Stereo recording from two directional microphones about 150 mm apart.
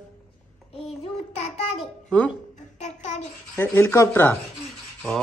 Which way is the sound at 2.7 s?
50° left (ahead or behind).